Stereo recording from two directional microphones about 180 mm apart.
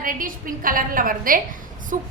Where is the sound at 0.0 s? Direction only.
50° right (ahead or behind).